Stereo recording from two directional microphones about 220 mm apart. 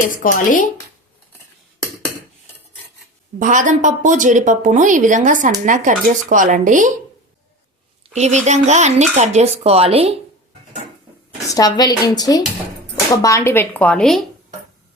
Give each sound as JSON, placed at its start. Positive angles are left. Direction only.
{"t": 0.2, "sound": "speech", "side_deg": 35}
{"t": 3.3, "sound": "a woman's voice", "side_deg": -35}
{"t": 8.1, "sound": "a woman's voice", "side_deg": -30}
{"t": 11.5, "sound": "speech", "side_deg": 15}